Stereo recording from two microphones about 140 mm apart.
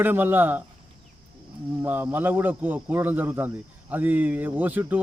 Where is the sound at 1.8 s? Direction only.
15° right (ahead or behind).